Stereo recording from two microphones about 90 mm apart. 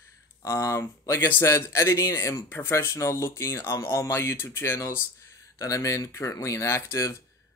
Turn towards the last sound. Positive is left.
turn(degrees=35)  # may be behind; listen again after turning